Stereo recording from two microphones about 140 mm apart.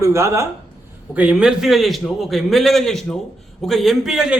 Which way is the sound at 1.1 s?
10° right (ahead or behind).